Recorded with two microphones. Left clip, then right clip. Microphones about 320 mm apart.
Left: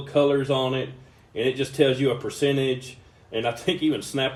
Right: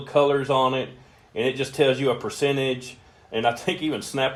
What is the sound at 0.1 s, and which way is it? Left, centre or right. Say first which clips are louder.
Speech: right 1 dB; centre.